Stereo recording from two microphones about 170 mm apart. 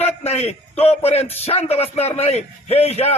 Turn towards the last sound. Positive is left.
turn(degrees=40)  # may be behind; listen again after turning